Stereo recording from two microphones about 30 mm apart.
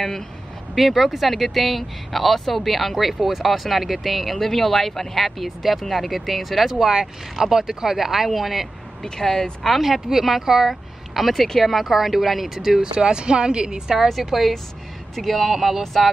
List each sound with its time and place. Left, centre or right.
0.7 s speech: centre
6.8 s speech: centre
9.0 s speech: centre
9.8 s speech: centre
10.7 s a sound: centre
11.6 s speech: centre
12.9 s speech: right
14.3 s speech: centre